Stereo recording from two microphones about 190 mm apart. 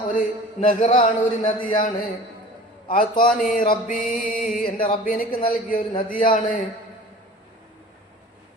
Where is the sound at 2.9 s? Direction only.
45° left (ahead or behind).